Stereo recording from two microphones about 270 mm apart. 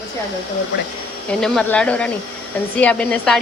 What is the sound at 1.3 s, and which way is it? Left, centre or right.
Speech, centre.